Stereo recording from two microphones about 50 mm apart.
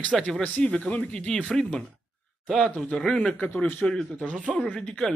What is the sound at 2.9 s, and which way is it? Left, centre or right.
Speech, left.